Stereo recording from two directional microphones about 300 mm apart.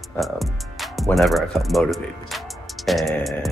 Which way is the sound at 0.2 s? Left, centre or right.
Centre.